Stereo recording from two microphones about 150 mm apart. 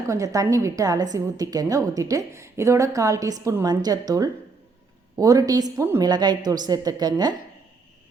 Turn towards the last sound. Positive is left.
turn(degrees=-25)  # may be behind; listen again after turning